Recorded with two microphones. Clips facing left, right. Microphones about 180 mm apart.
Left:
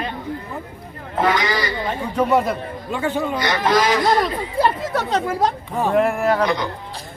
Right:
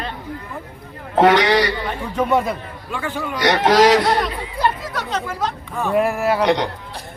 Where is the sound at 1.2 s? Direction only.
70° right (ahead or behind).